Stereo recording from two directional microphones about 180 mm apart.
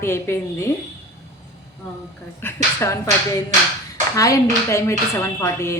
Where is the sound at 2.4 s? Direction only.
15° left (ahead or behind).